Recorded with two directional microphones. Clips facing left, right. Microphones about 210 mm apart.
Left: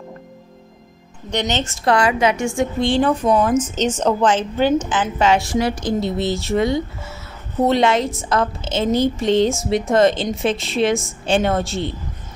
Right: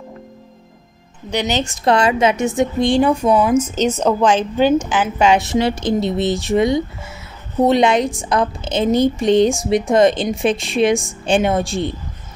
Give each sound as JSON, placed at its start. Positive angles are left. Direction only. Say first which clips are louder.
{"t": 1.3, "sound": "a woman's voice", "louder": "right 2 dB", "side_deg": -10}